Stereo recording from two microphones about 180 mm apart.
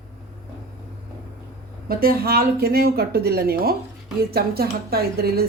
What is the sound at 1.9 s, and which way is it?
Speech, 55° right (ahead or behind).